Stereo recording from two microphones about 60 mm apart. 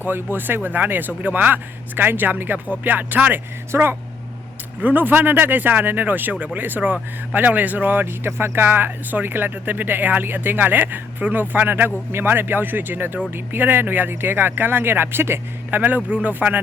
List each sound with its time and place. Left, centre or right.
0.0 s speech: right
4.8 s speech: right